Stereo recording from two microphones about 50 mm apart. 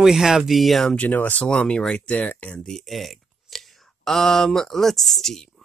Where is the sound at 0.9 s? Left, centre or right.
Left.